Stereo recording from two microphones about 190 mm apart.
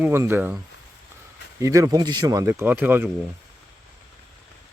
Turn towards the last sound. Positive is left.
turn(degrees=-10)  # may be behind; listen again after turning